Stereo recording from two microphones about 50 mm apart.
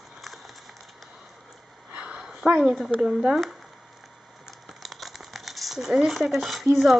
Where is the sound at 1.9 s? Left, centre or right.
Right.